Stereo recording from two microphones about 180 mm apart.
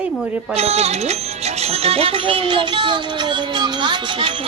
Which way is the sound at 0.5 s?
35° right (ahead or behind).